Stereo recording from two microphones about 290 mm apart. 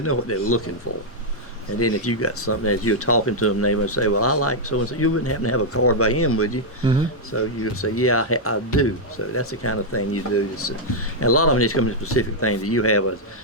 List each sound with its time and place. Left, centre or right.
0.0 s speech: left
1.8 s speech: left